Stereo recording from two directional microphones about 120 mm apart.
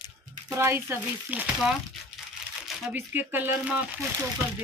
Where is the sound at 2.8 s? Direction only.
15° right (ahead or behind).